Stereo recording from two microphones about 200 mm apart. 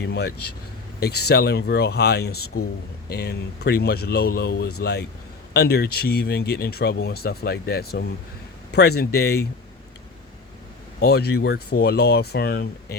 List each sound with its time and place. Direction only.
0.0 s speech: 55° left (ahead or behind)
11.0 s speech: 55° left (ahead or behind)